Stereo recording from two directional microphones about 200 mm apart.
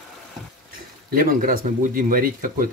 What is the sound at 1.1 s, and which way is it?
Speech, 45° right (ahead or behind).